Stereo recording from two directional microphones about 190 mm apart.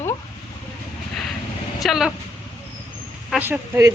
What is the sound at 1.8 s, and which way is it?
Speech, centre (ahead or behind).